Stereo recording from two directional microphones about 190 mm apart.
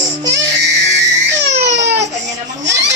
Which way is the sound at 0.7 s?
65° right (ahead or behind).